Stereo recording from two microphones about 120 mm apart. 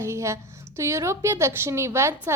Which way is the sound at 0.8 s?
25° right (ahead or behind).